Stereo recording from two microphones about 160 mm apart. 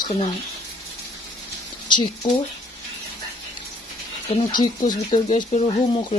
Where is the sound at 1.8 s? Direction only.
30° left (ahead or behind).